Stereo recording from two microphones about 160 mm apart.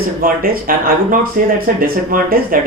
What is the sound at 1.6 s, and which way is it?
Speech, 65° right (ahead or behind).